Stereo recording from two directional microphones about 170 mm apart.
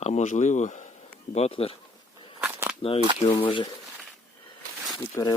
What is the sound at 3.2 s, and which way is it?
Speech, 30° left (ahead or behind).